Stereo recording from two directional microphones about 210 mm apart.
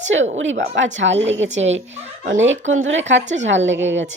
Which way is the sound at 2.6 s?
65° right (ahead or behind).